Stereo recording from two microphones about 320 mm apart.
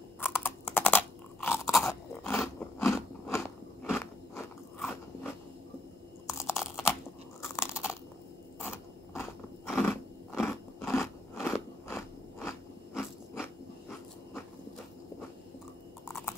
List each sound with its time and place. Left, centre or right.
0.2 s crunch: centre
3.8 s biting: centre
6.2 s crunch: centre
6.5 s computer keyboard: centre
7.4 s crunch: centre
8.5 s biting: centre
16.1 s typing: centre